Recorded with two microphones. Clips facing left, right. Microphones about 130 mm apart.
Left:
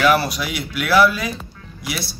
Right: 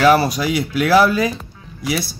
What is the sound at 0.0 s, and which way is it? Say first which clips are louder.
Speech: right 4 dB; 35° right (ahead or behind).